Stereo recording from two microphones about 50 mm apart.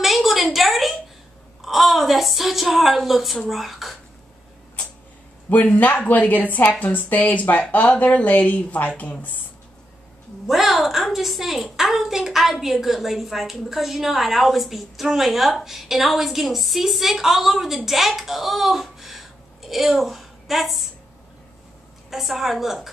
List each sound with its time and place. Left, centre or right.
0.0 s a sound: centre
1.6 s a woman's voice: centre
5.5 s speech: left
10.4 s a woman's voice: centre
22.1 s a woman's voice: centre